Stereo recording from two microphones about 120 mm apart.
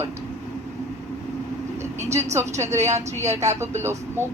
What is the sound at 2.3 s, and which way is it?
Speech, 25° right (ahead or behind).